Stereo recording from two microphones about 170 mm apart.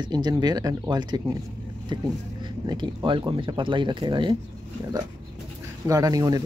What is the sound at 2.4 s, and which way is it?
Speech, 25° right (ahead or behind).